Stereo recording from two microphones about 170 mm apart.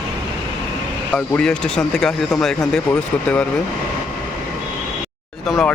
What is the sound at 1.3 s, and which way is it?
Speech, 5° left (ahead or behind).